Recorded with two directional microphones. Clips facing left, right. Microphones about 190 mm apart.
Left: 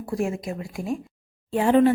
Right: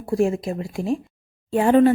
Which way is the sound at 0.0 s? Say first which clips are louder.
Right 6 dB; 30° right (ahead or behind).